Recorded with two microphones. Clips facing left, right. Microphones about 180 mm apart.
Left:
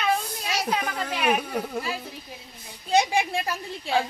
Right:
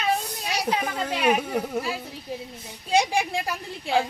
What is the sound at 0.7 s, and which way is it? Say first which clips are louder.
Speech: right 1 dB; 15° right (ahead or behind).